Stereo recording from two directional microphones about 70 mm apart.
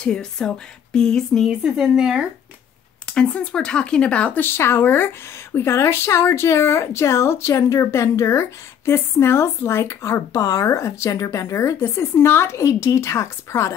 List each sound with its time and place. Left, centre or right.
0.0 s speech: centre
1.5 s a woman's voice: centre
3.2 s speech: centre
4.5 s speech: left
11.8 s speech: left